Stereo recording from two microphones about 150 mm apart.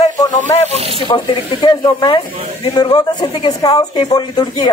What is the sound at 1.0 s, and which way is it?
Speech, 30° left (ahead or behind).